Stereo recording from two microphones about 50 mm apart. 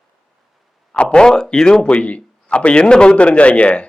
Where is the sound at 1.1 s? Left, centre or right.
Centre.